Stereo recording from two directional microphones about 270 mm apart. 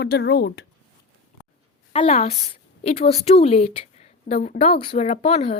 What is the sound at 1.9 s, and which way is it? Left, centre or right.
A woman's voice, left.